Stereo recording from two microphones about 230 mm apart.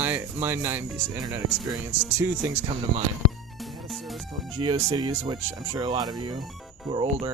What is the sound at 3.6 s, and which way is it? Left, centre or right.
Music, centre.